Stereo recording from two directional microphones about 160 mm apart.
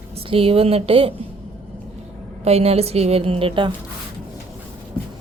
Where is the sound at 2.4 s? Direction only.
40° right (ahead or behind).